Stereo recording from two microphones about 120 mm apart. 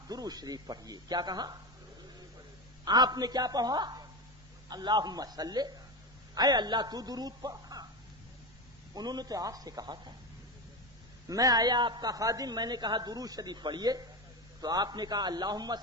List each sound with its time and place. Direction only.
0.1 s a man's voice: 30° right (ahead or behind)
2.8 s a man's voice: 35° right (ahead or behind)
9.0 s a man's voice: 35° right (ahead or behind)
11.3 s a man's voice: 30° right (ahead or behind)